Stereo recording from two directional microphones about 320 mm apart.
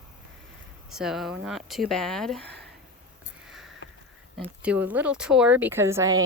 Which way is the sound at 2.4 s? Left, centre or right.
Right.